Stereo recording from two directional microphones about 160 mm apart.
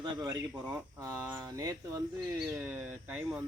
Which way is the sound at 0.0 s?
20° right (ahead or behind).